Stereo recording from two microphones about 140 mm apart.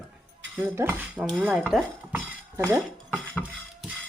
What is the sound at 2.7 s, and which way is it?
Dishes, centre (ahead or behind).